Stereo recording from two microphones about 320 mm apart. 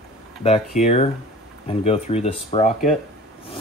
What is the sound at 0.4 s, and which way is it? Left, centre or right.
Speech, centre.